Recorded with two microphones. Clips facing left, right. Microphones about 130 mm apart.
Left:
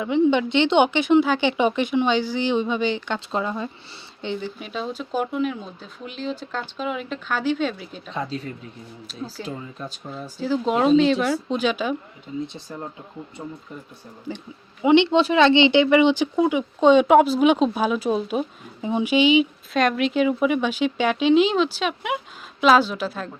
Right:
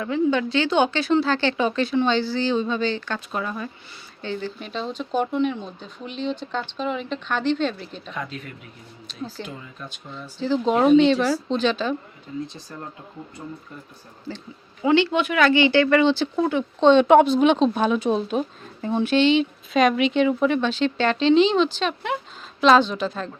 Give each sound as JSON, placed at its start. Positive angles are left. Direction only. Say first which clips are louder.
{"t": 0.0, "sound": "speech", "louder": "left 3 dB", "side_deg": 20}
{"t": 4.6, "sound": "speech", "louder": "even", "side_deg": 5}
{"t": 8.1, "sound": "speech", "louder": "left 5 dB", "side_deg": 30}
{"t": 9.0, "sound": "speech", "louder": "right 1 dB", "side_deg": 5}
{"t": 9.5, "sound": "speech", "louder": "left 5 dB", "side_deg": 35}
{"t": 10.4, "sound": "speech", "louder": "right 1 dB", "side_deg": 5}
{"t": 12.5, "sound": "speech", "louder": "left 3 dB", "side_deg": 25}